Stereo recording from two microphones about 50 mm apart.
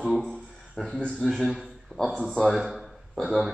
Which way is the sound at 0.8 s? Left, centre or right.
Left.